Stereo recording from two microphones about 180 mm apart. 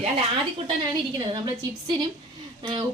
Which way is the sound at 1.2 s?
25° right (ahead or behind).